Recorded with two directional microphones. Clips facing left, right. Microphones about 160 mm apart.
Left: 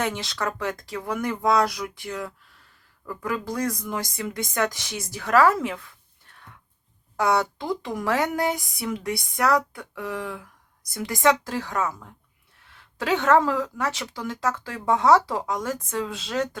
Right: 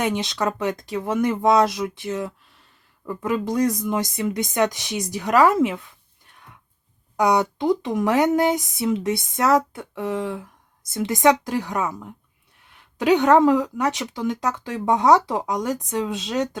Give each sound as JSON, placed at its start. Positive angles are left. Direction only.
{"t": 0.0, "sound": "speech", "side_deg": -20}
{"t": 7.2, "sound": "a woman's voice", "side_deg": -15}